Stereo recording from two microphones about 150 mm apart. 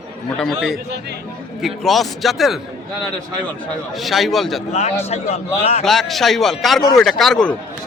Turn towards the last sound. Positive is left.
turn(degrees=5)  # may be behind; listen again after turning